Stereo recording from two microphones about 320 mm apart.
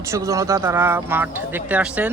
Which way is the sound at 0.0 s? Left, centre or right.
Centre.